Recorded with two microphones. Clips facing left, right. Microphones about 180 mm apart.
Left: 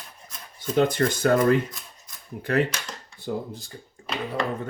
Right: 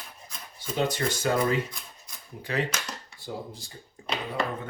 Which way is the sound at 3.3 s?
60° left (ahead or behind).